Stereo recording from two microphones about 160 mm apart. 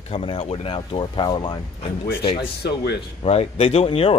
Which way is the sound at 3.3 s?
40° left (ahead or behind).